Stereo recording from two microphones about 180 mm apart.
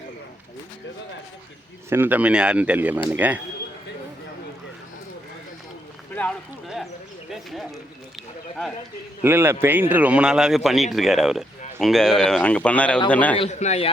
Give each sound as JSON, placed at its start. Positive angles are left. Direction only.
{"t": 1.9, "sound": "speech", "side_deg": -10}
{"t": 6.1, "sound": "a man's voice", "side_deg": 5}
{"t": 9.2, "sound": "a man's voice", "side_deg": -15}
{"t": 13.3, "sound": "a man's voice", "side_deg": 35}